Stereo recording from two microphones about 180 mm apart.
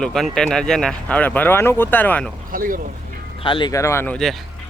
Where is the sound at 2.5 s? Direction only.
50° right (ahead or behind).